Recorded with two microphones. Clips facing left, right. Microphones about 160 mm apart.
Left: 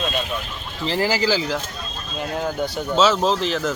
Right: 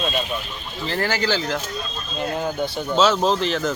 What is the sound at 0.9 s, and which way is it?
Speech, 5° left (ahead or behind).